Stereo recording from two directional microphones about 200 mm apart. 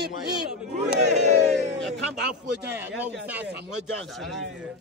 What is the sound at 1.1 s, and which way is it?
Speech, 35° right (ahead or behind).